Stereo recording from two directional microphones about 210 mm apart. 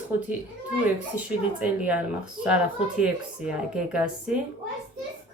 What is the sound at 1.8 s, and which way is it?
Speech, 5° right (ahead or behind).